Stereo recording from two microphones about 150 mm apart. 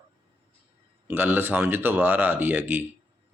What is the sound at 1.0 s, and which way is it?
Speech, 10° right (ahead or behind).